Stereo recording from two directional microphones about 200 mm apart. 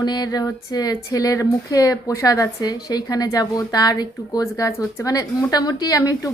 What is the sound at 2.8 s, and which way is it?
A woman's voice, 20° left (ahead or behind).